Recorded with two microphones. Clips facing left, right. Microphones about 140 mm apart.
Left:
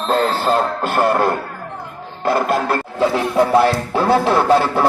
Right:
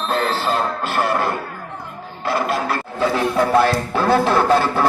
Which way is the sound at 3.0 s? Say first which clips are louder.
Left 2 dB; 25° left (ahead or behind).